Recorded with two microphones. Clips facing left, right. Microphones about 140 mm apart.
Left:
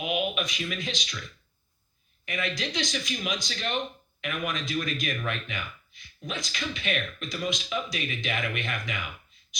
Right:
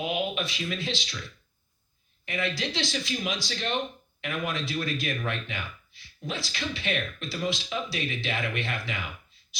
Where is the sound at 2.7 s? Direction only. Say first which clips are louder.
Even; 20° left (ahead or behind).